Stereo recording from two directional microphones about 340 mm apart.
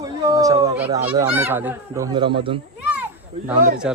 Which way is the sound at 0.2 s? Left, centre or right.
Centre.